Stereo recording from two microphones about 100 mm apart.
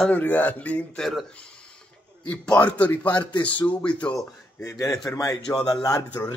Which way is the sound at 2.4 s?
15° left (ahead or behind).